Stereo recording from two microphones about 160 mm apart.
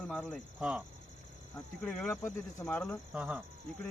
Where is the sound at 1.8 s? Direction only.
10° left (ahead or behind).